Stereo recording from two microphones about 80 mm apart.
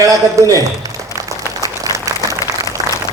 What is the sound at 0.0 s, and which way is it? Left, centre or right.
Speech, right.